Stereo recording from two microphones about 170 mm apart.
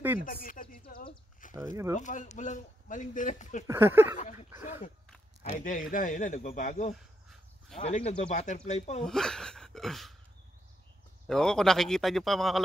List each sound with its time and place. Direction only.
0.2 s a sound: 55° left (ahead or behind)
2.0 s a man's voice: 45° left (ahead or behind)
3.6 s speech: 15° right (ahead or behind)
4.2 s a man's voice: 40° left (ahead or behind)
7.8 s speech: 35° left (ahead or behind)
9.0 s speech: 5° left (ahead or behind)
11.2 s a man's voice: 5° left (ahead or behind)